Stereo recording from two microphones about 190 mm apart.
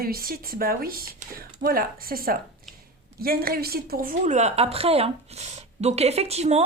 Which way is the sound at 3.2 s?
50° right (ahead or behind).